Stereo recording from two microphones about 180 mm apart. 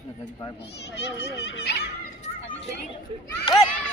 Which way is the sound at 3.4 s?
20° left (ahead or behind).